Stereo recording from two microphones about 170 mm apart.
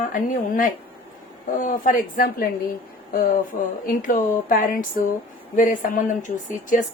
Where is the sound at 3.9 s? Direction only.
50° left (ahead or behind).